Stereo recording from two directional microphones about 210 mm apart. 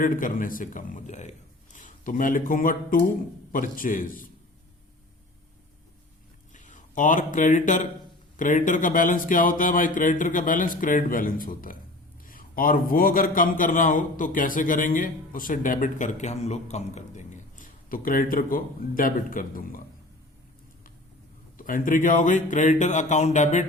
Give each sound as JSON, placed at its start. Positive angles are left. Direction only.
{"t": 0.0, "sound": "a man's voice", "side_deg": 40}
{"t": 6.5, "sound": "a man's voice", "side_deg": 35}
{"t": 21.6, "sound": "a man's voice", "side_deg": 40}